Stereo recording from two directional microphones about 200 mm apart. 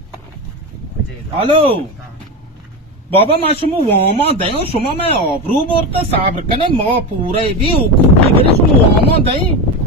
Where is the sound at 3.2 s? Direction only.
30° left (ahead or behind).